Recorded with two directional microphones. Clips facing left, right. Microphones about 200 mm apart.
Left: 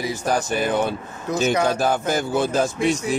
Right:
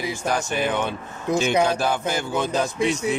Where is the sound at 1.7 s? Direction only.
45° left (ahead or behind).